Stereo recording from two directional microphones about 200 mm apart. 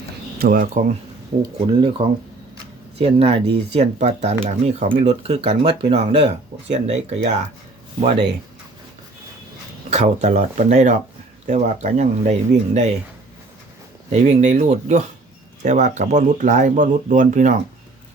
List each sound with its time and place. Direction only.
0.3 s speech: 45° right (ahead or behind)
1.4 s speech: 25° right (ahead or behind)
9.9 s speech: 35° right (ahead or behind)
14.1 s speech: 35° right (ahead or behind)